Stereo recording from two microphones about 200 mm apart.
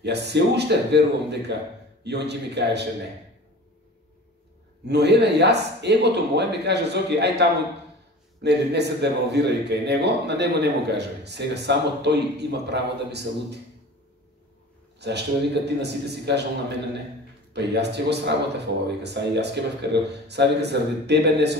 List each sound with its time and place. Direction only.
0.0 s a man's voice: 55° right (ahead or behind)
4.8 s a man's voice: 55° right (ahead or behind)
15.0 s a man's voice: 55° right (ahead or behind)
17.5 s a man's voice: 55° right (ahead or behind)